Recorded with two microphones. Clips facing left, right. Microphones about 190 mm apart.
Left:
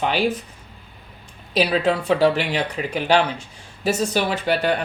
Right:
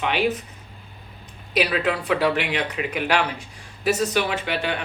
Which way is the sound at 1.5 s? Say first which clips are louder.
Left 3 dB; 30° left (ahead or behind).